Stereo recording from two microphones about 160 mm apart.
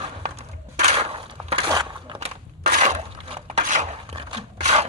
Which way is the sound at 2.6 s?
50° right (ahead or behind).